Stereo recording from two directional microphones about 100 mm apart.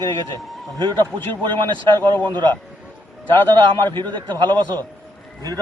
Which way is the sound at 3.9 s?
50° right (ahead or behind).